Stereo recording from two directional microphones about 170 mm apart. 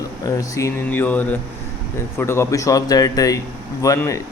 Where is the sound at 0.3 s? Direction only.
20° left (ahead or behind).